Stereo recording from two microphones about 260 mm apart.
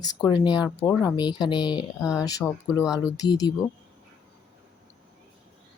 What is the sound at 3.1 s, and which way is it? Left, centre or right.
Speech, centre.